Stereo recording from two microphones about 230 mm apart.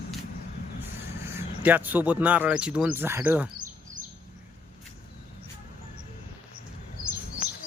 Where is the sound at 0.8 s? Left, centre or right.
Centre.